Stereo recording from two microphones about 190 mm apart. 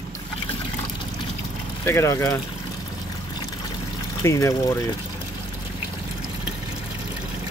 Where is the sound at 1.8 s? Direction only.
15° left (ahead or behind).